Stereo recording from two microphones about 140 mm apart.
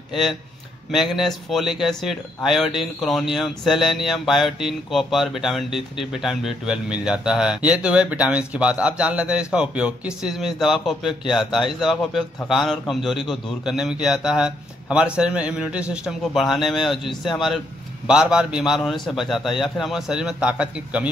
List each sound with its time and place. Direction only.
0.1 s speech: centre (ahead or behind)